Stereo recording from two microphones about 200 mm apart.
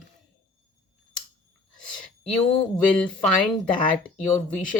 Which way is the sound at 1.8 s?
5° left (ahead or behind).